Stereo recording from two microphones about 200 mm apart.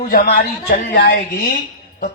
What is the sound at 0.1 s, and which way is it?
Speech, 45° left (ahead or behind).